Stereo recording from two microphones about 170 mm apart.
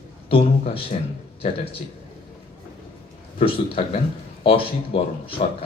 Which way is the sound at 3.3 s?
35° left (ahead or behind).